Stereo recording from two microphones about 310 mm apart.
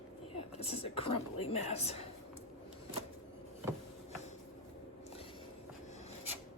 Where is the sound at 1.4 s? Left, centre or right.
Centre.